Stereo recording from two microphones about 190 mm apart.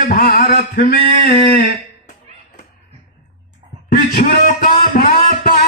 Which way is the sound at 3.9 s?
50° left (ahead or behind).